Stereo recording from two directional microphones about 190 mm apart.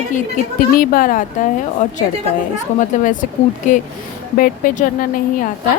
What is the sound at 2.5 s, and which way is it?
A woman's voice, 40° left (ahead or behind).